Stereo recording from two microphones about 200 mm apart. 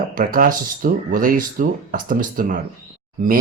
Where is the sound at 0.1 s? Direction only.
45° right (ahead or behind).